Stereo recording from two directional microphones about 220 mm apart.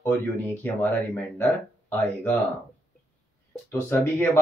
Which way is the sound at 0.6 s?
10° left (ahead or behind).